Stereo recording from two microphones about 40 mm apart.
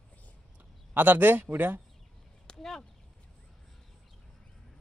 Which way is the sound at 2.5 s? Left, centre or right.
Centre.